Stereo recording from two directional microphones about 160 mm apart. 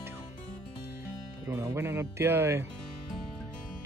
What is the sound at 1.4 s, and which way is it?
Speech, 15° right (ahead or behind).